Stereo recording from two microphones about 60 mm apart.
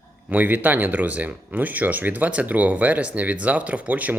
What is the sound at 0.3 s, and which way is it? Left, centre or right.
Speech, right.